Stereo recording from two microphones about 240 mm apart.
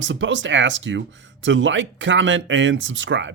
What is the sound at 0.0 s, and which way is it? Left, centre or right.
Speech, right.